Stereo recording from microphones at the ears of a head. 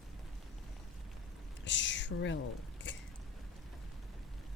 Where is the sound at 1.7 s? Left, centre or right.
Left.